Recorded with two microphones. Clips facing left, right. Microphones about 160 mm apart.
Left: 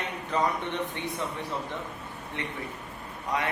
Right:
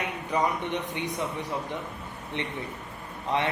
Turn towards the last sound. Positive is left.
turn(degrees=-25)  # may be behind; listen again after turning